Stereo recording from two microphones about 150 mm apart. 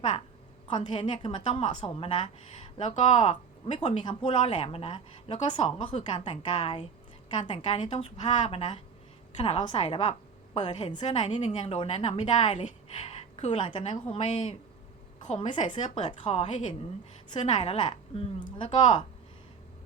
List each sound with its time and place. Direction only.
0.7 s a woman's voice: 50° left (ahead or behind)
1.2 s a woman's voice: 35° left (ahead or behind)
4.0 s a woman's voice: 35° left (ahead or behind)